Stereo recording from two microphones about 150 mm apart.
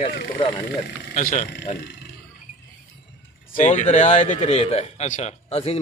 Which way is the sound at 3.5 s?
55° left (ahead or behind).